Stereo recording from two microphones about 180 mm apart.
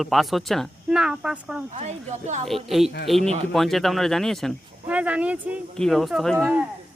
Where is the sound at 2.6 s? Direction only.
Centre (ahead or behind).